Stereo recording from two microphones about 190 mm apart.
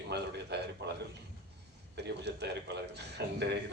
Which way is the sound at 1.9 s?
60° right (ahead or behind).